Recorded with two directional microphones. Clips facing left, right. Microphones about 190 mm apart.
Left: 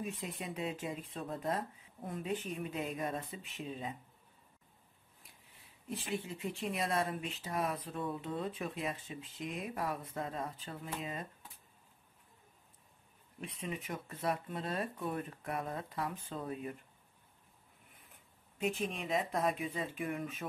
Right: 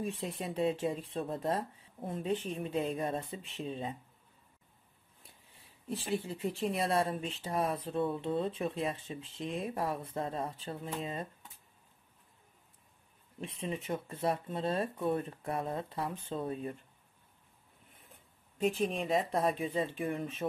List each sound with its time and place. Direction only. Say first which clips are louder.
0.0 s speech: right 4 dB; 30° right (ahead or behind)
5.9 s speech: right 4 dB; 35° right (ahead or behind)
13.4 s speech: right 4 dB; 30° right (ahead or behind)
18.6 s speech: right 5 dB; 35° right (ahead or behind)